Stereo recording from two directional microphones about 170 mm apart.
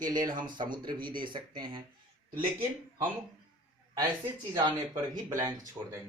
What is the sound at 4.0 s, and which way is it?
Speech, 20° right (ahead or behind).